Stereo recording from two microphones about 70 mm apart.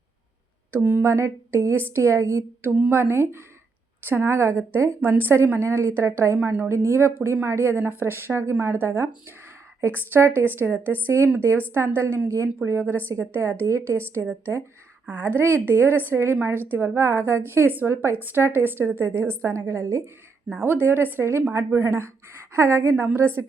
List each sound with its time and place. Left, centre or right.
0.7 s a woman's voice: right
1.0 s a woman's voice: right
4.9 s a woman's voice: right
11.1 s a woman's voice: right
13.7 s a woman's voice: right
15.0 s a woman's voice: right
20.5 s a woman's voice: right